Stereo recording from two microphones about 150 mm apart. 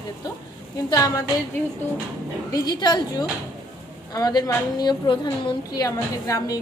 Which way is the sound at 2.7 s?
30° left (ahead or behind).